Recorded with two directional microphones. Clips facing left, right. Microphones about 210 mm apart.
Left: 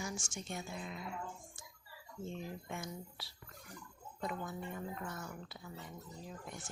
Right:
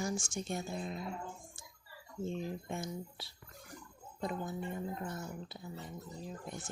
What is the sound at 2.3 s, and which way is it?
Speech, 30° right (ahead or behind).